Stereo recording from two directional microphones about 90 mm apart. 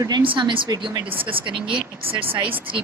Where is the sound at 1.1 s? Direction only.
80° right.